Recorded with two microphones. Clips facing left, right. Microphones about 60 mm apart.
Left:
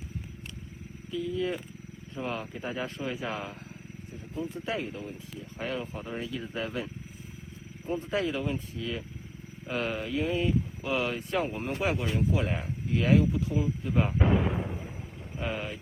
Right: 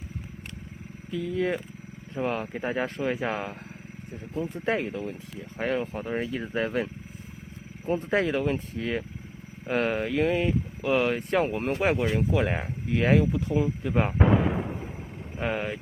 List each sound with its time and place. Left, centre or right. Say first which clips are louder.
1.1 s speech: right 3 dB; right
15.4 s speech: right 5 dB; right